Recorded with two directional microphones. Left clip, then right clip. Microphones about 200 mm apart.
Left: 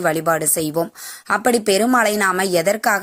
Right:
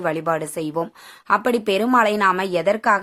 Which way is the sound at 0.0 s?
15° left (ahead or behind).